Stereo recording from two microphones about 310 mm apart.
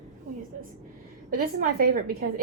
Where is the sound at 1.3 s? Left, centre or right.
Right.